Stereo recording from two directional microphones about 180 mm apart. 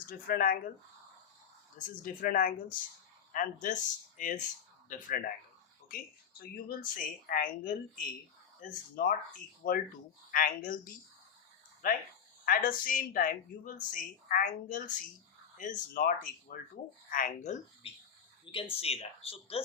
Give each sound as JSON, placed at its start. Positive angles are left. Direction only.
{"t": 0.1, "sound": "speech", "side_deg": 50}
{"t": 2.0, "sound": "speech", "side_deg": 50}
{"t": 6.4, "sound": "speech", "side_deg": 55}
{"t": 11.8, "sound": "speech", "side_deg": 50}
{"t": 18.5, "sound": "speech", "side_deg": 30}